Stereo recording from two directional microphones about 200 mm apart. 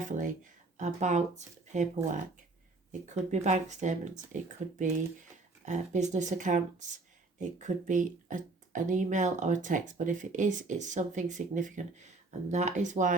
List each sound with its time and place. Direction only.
0.0 s speech: 40° right (ahead or behind)
2.9 s speech: 35° right (ahead or behind)